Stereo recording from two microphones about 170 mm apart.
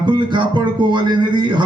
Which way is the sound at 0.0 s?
25° right (ahead or behind).